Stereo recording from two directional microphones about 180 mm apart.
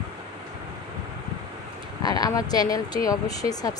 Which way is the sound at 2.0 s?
20° left (ahead or behind).